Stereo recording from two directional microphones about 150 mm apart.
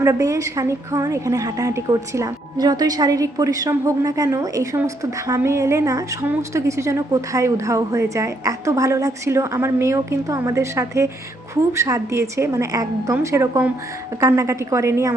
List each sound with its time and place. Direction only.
0.0 s a woman's voice: 20° right (ahead or behind)